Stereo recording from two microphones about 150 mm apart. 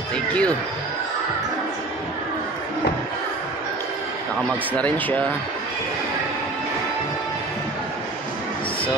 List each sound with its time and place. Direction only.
0.1 s music: 10° left (ahead or behind)
4.7 s speech: 10° left (ahead or behind)